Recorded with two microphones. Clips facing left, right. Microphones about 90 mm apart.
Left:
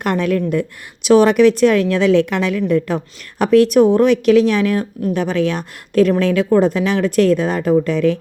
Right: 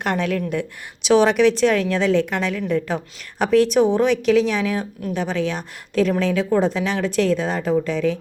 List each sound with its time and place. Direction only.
0.0 s a woman's voice: 50° left (ahead or behind)